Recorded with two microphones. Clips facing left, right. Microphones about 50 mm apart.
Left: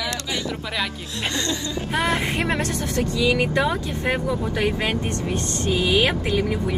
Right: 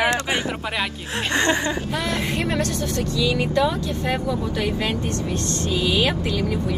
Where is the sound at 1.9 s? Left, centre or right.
Left.